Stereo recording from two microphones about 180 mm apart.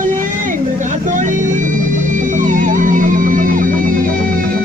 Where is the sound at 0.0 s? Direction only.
45° right (ahead or behind).